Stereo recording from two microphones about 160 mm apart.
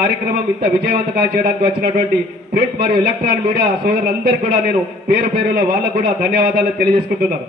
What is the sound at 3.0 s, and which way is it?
A man's voice, 70° right (ahead or behind).